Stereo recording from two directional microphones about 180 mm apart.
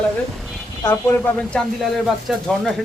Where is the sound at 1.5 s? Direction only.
5° left (ahead or behind).